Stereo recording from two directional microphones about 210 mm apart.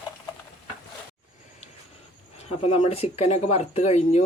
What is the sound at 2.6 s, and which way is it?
Speech, 30° left (ahead or behind).